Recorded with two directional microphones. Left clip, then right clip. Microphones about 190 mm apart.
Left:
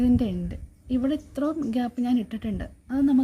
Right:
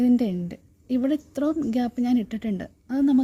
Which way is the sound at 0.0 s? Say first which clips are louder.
Right 2 dB; 25° right (ahead or behind).